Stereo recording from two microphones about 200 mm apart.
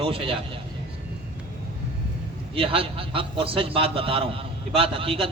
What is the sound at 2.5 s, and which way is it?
A man's voice, 25° right (ahead or behind).